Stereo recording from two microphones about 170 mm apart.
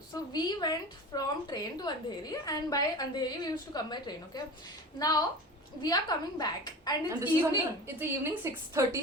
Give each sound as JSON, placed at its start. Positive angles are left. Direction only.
{"t": 0.3, "sound": "a woman's voice", "side_deg": 25}
{"t": 7.1, "sound": "a woman's voice", "side_deg": -15}